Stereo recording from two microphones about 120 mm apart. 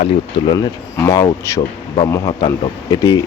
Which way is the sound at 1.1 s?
25° left (ahead or behind).